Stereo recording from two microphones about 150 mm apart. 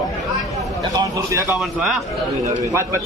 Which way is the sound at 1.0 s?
20° right (ahead or behind).